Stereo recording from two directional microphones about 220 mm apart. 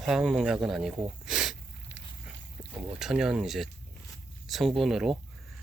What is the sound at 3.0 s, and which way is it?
Speech, 5° right (ahead or behind).